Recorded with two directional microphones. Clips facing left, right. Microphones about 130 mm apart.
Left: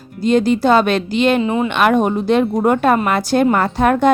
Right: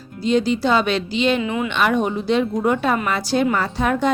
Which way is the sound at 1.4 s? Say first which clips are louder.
Left 5 dB; 35° left (ahead or behind).